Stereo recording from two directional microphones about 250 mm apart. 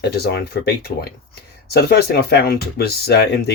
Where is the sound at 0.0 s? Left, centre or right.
Left.